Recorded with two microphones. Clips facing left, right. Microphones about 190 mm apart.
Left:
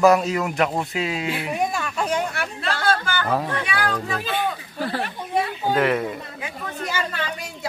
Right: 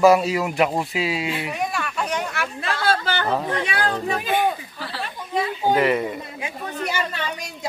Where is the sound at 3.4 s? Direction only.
25° right (ahead or behind).